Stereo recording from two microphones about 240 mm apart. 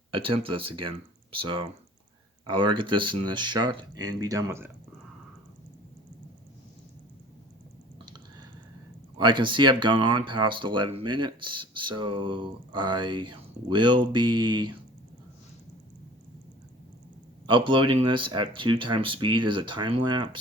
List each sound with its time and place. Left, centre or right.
0.1 s speech: right
7.9 s computer keyboard: centre
9.1 s speech: centre
17.4 s speech: right